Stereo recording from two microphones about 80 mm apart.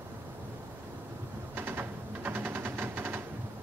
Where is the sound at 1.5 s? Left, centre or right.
Right.